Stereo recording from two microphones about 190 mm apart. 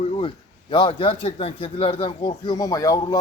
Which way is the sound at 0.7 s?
25° left (ahead or behind).